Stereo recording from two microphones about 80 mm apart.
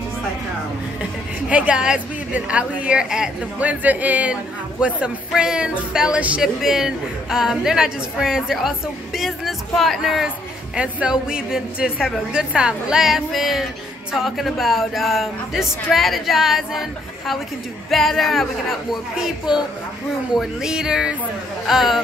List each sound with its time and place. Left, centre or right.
1.5 s a woman's voice: centre
6.4 s a woman's voice: centre
17.8 s a woman's voice: centre